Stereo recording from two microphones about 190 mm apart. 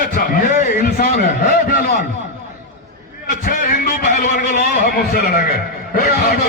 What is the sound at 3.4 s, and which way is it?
A man's voice, 45° left (ahead or behind).